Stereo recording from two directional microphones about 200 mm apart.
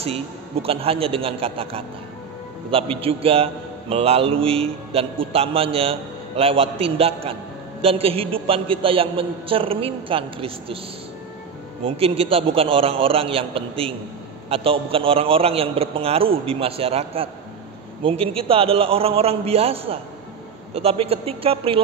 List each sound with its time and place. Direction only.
0.0 s a man's voice: 30° right (ahead or behind)
11.8 s a man's voice: 30° right (ahead or behind)